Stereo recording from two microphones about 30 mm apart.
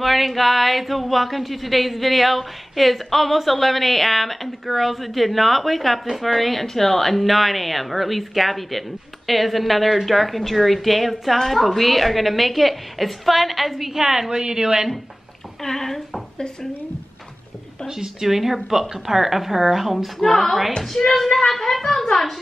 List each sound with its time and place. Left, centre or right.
0.0 s a sound: centre
6.6 s a sound: centre
14.3 s speech: right
15.6 s speech: centre
17.8 s speech: centre
20.2 s a woman's voice: centre